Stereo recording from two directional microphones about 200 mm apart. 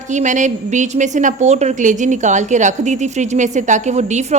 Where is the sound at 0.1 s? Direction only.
40° right (ahead or behind).